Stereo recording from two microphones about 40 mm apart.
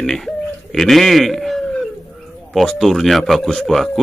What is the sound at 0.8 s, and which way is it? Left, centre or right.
Speech, centre.